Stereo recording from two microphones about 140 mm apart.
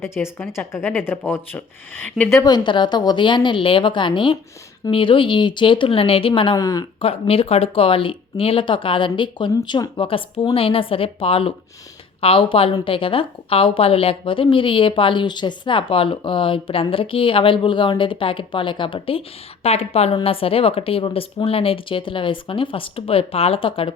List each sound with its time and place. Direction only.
0.0 s speech: 15° left (ahead or behind)
2.3 s a woman's voice: 30° left (ahead or behind)
6.6 s speech: 25° left (ahead or behind)
7.0 s a woman's voice: 45° left (ahead or behind)